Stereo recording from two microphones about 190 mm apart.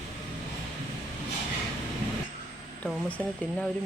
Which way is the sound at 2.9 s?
5° right (ahead or behind).